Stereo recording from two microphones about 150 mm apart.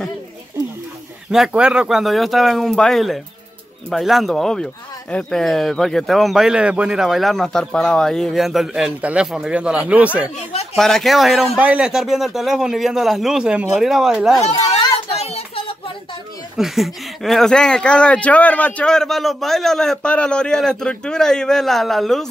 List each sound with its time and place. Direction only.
1.3 s speech: 5° right (ahead or behind)
10.5 s speech: 45° left (ahead or behind)
10.8 s speech: 5° left (ahead or behind)
15.1 s a sound: 45° left (ahead or behind)
16.5 s speech: centre (ahead or behind)